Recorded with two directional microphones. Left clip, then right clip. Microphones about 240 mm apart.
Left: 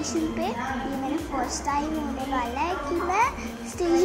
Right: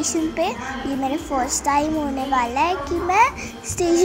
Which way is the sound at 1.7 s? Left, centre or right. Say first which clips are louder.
Right 9 dB; right.